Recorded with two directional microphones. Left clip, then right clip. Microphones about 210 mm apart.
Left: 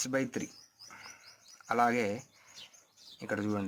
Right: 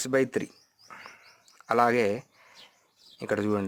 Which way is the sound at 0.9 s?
45° right (ahead or behind).